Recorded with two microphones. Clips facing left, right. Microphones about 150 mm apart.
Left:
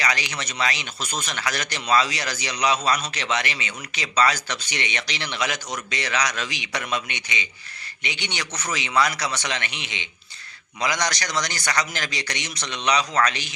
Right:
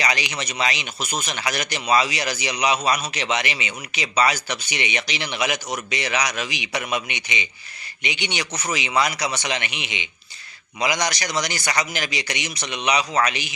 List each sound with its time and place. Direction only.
0.0 s speech: 15° right (ahead or behind)